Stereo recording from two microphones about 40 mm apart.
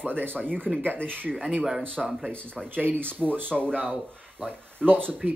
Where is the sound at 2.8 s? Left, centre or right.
Right.